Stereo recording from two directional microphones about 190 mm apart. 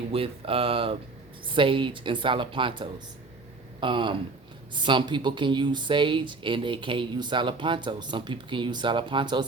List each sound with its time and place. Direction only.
0.1 s speech: 30° right (ahead or behind)